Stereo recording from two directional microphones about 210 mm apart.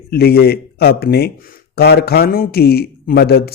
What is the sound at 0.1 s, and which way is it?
Speech, 50° left (ahead or behind).